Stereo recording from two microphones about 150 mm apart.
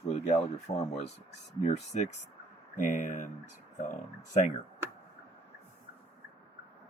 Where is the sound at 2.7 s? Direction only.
60° left (ahead or behind).